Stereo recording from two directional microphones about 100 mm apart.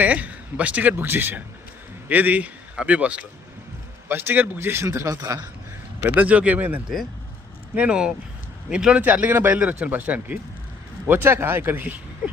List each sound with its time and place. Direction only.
0.0 s a man's voice: 15° right (ahead or behind); by 5.5 s 35° right (ahead or behind)
6.1 s a man's voice: 15° right (ahead or behind)